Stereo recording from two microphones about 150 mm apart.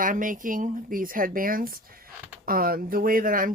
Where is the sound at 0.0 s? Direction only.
65° right (ahead or behind).